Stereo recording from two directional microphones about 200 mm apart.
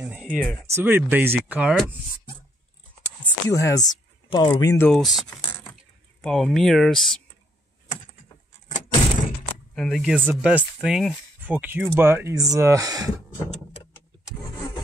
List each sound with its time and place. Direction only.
0.0 s speech: 5° right (ahead or behind)
3.4 s speech: 15° left (ahead or behind)
8.6 s vehicle: 40° left (ahead or behind)
9.8 s speech: centre (ahead or behind); by 13.1 s 15° right (ahead or behind)